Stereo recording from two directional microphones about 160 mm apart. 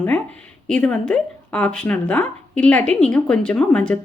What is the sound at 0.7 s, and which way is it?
Speech, 5° left (ahead or behind).